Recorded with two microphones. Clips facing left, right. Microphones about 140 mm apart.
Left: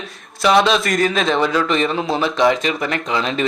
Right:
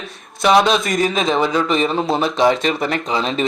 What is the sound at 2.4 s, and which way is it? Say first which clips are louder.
Speech: even; 30° right (ahead or behind).